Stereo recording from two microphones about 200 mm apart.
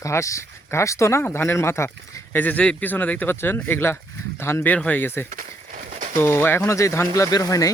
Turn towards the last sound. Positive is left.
turn(degrees=15)  # may be behind; listen again after turning